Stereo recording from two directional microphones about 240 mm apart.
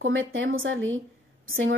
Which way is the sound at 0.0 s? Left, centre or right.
Right.